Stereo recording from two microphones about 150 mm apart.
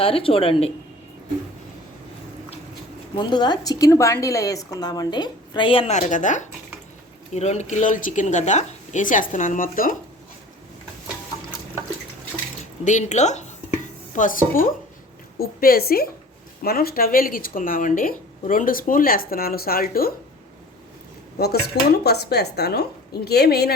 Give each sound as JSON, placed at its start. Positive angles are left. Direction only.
{"t": 0.0, "sound": "speech", "side_deg": 40}
{"t": 3.2, "sound": "a woman's voice", "side_deg": 30}
{"t": 5.9, "sound": "speech", "side_deg": 55}
{"t": 12.8, "sound": "speech", "side_deg": 55}
{"t": 14.1, "sound": "speech", "side_deg": 60}
{"t": 15.4, "sound": "a woman's voice", "side_deg": 90}
{"t": 21.3, "sound": "a woman's voice", "side_deg": 90}